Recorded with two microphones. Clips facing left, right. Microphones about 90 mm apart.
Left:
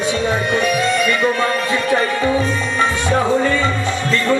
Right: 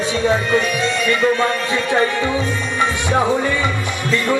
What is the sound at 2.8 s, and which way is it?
Music, 15° right (ahead or behind).